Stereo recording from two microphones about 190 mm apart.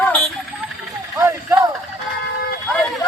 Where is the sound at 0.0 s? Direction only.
10° left (ahead or behind).